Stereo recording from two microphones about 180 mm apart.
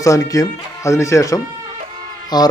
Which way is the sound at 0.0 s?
20° left (ahead or behind).